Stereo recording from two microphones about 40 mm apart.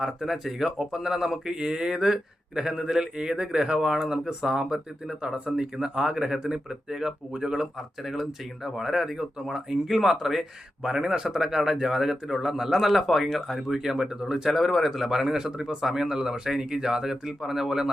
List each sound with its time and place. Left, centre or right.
0.0 s speech: centre
13.7 s speech: centre
14.5 s speech: centre